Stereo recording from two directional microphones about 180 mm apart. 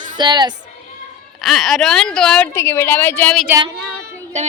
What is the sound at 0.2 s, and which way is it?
Speech, 25° right (ahead or behind).